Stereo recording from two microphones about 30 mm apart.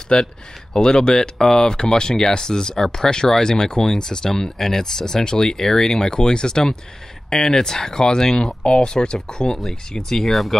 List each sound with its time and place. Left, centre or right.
0.1 s speech: left
9.6 s speech: centre
10.3 s speech: centre